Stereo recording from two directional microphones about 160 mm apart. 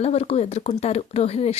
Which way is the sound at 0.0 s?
40° left (ahead or behind).